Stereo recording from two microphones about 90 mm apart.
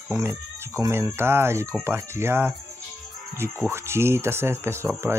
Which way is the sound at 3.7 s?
30° right (ahead or behind).